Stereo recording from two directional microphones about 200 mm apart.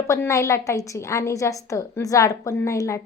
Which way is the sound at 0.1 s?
15° left (ahead or behind).